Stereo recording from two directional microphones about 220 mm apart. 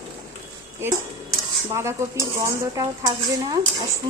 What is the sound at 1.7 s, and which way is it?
Dishes, 15° right (ahead or behind).